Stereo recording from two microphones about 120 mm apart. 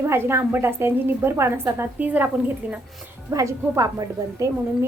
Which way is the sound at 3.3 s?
25° right (ahead or behind).